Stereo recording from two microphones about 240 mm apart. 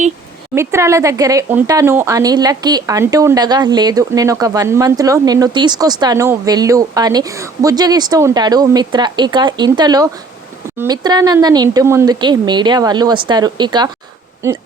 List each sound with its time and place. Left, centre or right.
0.5 s speech: centre